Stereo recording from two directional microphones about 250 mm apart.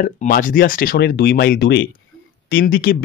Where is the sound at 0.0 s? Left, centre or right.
Left.